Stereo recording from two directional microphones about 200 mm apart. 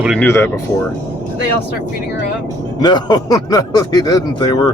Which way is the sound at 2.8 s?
20° left (ahead or behind).